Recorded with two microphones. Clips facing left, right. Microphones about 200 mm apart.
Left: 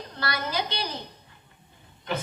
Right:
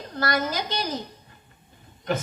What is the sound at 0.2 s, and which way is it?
Speech, 45° right (ahead or behind).